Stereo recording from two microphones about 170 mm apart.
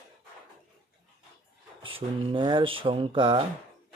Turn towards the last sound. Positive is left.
turn(degrees=-30)  # may be behind; listen again after turning